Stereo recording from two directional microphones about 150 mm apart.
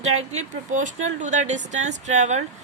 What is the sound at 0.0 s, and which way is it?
Speech, 50° right (ahead or behind).